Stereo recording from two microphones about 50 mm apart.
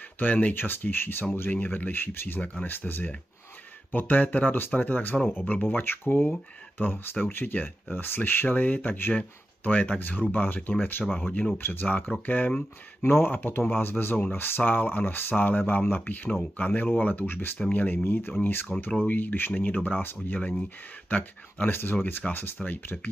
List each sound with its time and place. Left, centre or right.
0.2 s speech: left
5.6 s speech: left
13.0 s speech: left